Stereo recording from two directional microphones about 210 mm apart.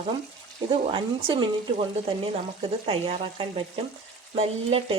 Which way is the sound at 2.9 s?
25° right (ahead or behind).